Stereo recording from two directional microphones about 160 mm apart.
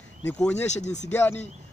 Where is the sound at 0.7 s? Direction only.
45° left (ahead or behind).